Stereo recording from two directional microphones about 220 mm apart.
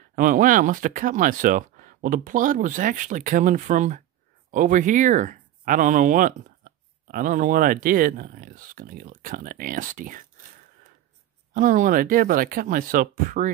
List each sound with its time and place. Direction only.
0.1 s speech: 35° right (ahead or behind)
11.5 s speech: 35° right (ahead or behind)